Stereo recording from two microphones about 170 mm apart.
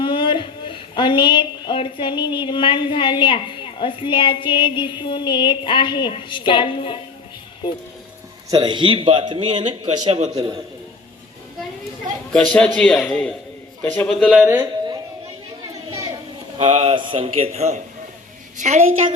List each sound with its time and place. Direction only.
0.0 s a woman's voice: 30° left (ahead or behind)
8.4 s a man's voice: 25° right (ahead or behind)
12.3 s a man's voice: 5° left (ahead or behind)
14.4 s speech: 10° right (ahead or behind)
16.6 s a man's voice: 35° right (ahead or behind)